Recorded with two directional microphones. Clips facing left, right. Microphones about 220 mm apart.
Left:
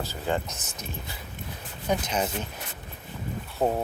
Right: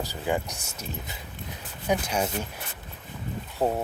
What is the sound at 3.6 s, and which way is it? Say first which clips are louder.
Speech: even; 10° left (ahead or behind).